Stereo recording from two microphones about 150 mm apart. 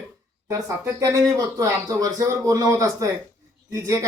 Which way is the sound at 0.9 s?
25° right (ahead or behind).